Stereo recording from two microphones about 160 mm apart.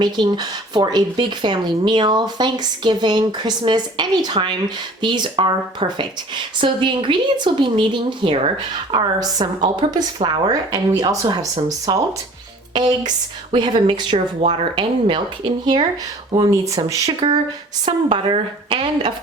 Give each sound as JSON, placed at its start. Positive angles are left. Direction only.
{"t": 0.0, "sound": "speech", "side_deg": -25}
{"t": 16.3, "sound": "speech", "side_deg": -25}
{"t": 17.8, "sound": "speech", "side_deg": -35}